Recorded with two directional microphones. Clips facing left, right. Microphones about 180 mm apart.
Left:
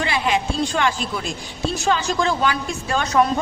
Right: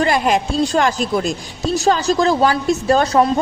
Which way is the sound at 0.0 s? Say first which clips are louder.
Right 5 dB; 45° right (ahead or behind).